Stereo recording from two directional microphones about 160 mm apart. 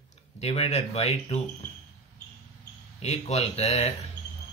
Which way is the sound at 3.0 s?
45° left (ahead or behind).